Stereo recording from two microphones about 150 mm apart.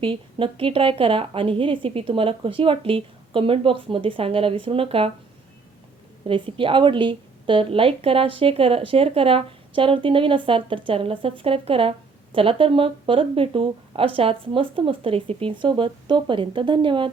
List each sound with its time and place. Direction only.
0.0 s a woman's voice: 35° right (ahead or behind)
6.2 s a woman's voice: 35° right (ahead or behind)